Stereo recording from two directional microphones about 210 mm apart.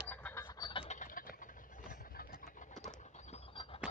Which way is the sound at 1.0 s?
40° left (ahead or behind).